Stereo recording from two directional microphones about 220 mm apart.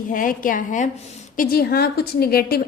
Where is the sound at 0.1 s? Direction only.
40° left (ahead or behind).